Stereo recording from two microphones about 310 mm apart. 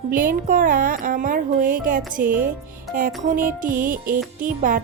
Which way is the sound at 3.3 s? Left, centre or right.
Right.